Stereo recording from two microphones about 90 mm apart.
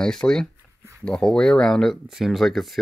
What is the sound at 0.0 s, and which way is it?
Speech, 5° left (ahead or behind).